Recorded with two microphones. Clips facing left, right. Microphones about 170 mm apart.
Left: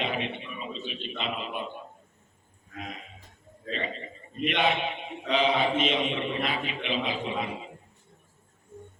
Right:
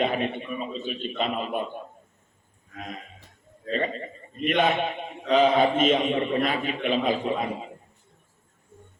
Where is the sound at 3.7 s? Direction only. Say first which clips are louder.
Right 6 dB; 45° right (ahead or behind).